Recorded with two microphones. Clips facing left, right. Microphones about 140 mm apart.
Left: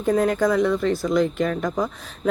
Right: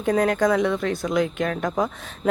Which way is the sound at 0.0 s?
Centre (ahead or behind).